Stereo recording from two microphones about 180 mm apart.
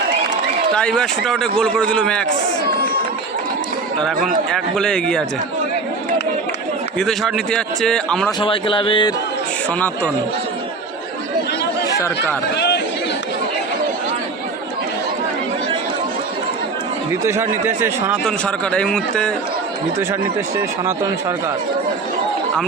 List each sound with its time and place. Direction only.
0.8 s a man's voice: 5° left (ahead or behind)
4.5 s a man's voice: 5° left (ahead or behind)
7.0 s a man's voice: centre (ahead or behind)
8.4 s music: 30° left (ahead or behind)
11.9 s speech: 15° left (ahead or behind)
12.5 s chatter: 70° left (ahead or behind)
17.2 s speech: 15° right (ahead or behind)
18.3 s a man's voice: 5° left (ahead or behind)
20.8 s speech: 15° right (ahead or behind)